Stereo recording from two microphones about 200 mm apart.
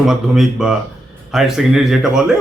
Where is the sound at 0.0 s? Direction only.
Centre (ahead or behind).